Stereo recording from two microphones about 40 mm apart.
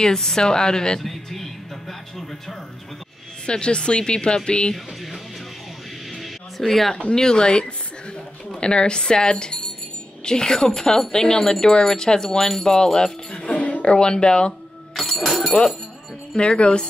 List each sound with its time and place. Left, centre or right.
0.0 s speech: centre
1.0 s speech: centre
3.4 s speech: left
4.7 s speech: centre
6.6 s speech: centre
13.5 s speech: left
15.0 s speech: centre
16.3 s speech: left